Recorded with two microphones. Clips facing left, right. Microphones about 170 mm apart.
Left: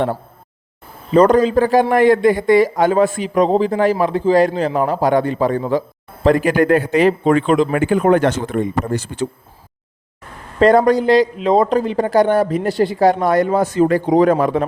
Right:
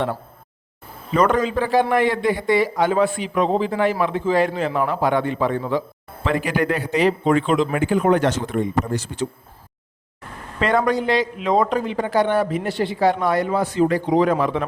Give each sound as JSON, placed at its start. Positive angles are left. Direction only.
{"t": 1.1, "sound": "speech", "side_deg": 35}
{"t": 10.6, "sound": "speech", "side_deg": 40}